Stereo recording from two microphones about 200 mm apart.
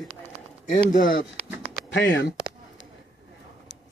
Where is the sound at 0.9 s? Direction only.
45° left (ahead or behind).